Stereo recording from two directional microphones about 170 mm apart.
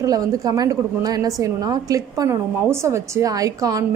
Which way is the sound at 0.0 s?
20° right (ahead or behind).